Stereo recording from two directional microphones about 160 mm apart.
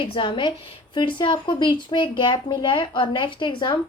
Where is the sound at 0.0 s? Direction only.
30° left (ahead or behind).